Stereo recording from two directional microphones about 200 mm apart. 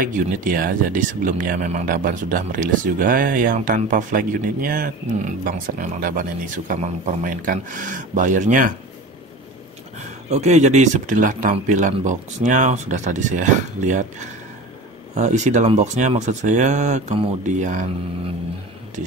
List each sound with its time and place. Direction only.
0.0 s speech: 45° right (ahead or behind)
9.9 s speech: 35° right (ahead or behind)
15.1 s speech: 35° right (ahead or behind)